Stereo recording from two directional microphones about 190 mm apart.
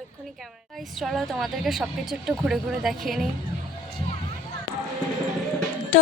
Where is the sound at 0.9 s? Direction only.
Centre (ahead or behind).